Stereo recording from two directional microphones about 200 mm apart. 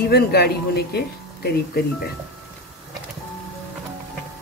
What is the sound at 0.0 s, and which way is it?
Speech, 50° left (ahead or behind).